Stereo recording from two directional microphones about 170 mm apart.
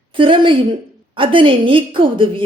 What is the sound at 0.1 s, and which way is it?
A woman's voice, 30° right (ahead or behind).